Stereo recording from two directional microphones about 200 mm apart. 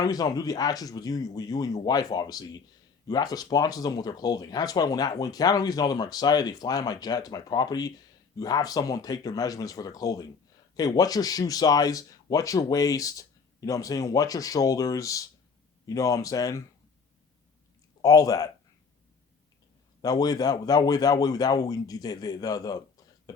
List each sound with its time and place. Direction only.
0.0 s a man's voice: 20° left (ahead or behind)
18.0 s a man's voice: 15° left (ahead or behind)
20.0 s speech: 20° left (ahead or behind)